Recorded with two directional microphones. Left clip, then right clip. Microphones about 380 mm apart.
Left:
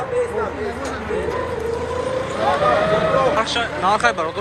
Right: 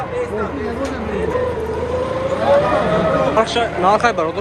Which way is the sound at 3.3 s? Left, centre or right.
Centre.